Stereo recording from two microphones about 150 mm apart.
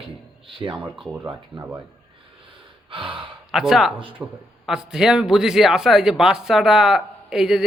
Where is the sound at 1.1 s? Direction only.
10° right (ahead or behind).